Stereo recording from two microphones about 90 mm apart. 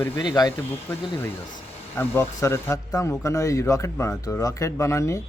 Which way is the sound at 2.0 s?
30° left (ahead or behind).